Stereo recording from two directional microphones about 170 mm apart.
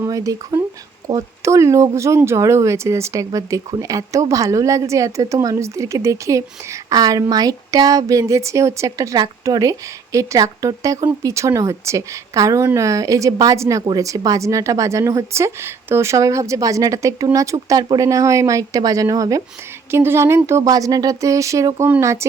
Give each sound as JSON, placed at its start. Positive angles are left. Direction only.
{"t": 0.0, "sound": "speech", "side_deg": -20}